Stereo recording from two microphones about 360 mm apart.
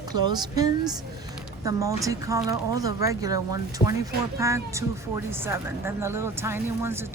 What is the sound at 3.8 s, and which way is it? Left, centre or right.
Speech, centre.